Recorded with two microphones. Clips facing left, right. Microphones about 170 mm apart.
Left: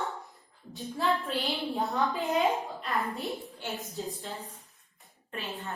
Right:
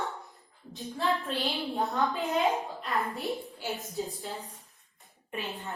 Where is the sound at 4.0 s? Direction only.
Centre (ahead or behind).